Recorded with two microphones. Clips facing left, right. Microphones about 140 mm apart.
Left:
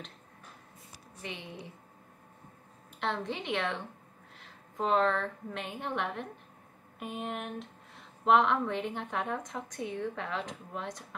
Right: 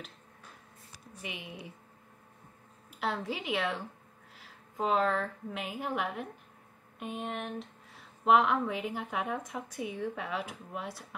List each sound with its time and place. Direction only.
1.2 s speech: 10° right (ahead or behind)
3.0 s a woman's voice: 5° right (ahead or behind)